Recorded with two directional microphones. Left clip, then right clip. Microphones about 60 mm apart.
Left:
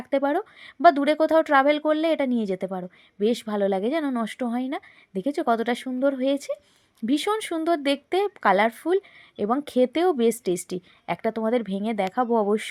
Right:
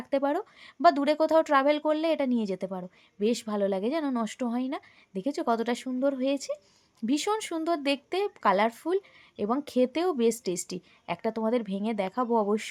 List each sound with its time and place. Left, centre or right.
0.0 s speech: left